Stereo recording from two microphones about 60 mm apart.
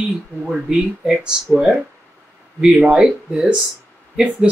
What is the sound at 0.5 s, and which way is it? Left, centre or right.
Speech, centre.